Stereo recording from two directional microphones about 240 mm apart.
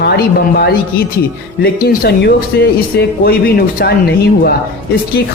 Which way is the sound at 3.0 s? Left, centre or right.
Left.